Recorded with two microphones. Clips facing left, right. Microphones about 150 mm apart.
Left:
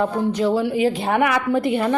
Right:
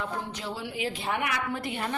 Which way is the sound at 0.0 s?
55° left (ahead or behind).